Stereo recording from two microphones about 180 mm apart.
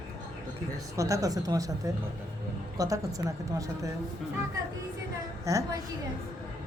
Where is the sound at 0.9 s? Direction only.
15° right (ahead or behind).